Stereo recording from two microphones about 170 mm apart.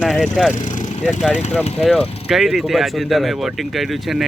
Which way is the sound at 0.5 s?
45° left (ahead or behind).